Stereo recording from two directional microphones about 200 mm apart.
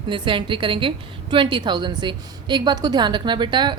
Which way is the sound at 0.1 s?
25° right (ahead or behind).